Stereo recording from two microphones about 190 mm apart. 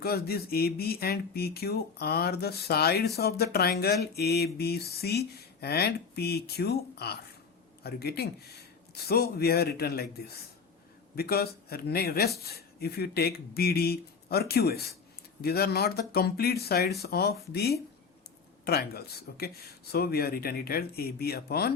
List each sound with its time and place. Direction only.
0.0 s speech: 55° left (ahead or behind)